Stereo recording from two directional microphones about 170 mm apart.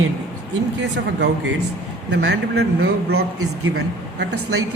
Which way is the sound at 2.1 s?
90° right.